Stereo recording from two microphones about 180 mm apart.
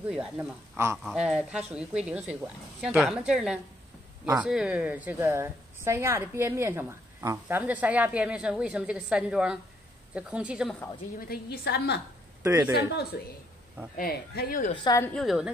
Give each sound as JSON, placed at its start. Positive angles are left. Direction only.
{"t": 0.1, "sound": "a woman's voice", "side_deg": -5}
{"t": 11.1, "sound": "a woman's voice", "side_deg": 60}
{"t": 12.4, "sound": "a woman's voice", "side_deg": -15}
{"t": 13.1, "sound": "a woman's voice", "side_deg": 60}
{"t": 14.8, "sound": "a woman's voice", "side_deg": 20}
{"t": 15.1, "sound": "a woman's voice", "side_deg": 0}